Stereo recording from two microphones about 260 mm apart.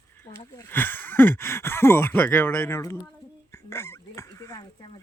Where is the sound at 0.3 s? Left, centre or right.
Centre.